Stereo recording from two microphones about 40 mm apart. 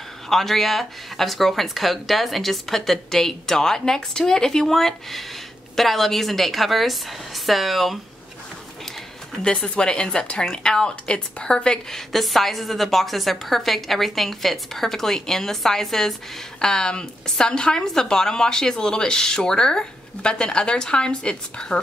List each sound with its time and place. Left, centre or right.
0.3 s a woman's voice: centre
9.4 s a woman's voice: left
12.1 s a woman's voice: centre
16.6 s a woman's voice: centre